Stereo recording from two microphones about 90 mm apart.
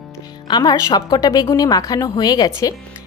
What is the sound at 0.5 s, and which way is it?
A woman's voice, 50° left (ahead or behind).